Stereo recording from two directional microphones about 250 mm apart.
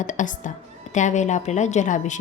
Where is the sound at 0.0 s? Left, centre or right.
Left.